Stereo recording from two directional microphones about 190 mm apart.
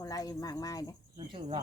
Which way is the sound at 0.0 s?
20° left (ahead or behind).